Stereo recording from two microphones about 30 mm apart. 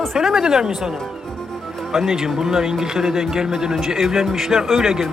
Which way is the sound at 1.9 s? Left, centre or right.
Centre.